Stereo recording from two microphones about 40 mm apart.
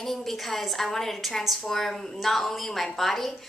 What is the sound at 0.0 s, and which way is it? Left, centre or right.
A woman's voice, centre.